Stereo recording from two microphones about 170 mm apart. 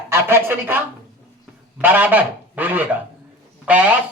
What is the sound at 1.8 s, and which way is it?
Speech, 10° right (ahead or behind).